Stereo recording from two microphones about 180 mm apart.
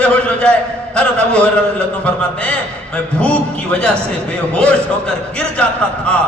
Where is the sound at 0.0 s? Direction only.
5° left (ahead or behind).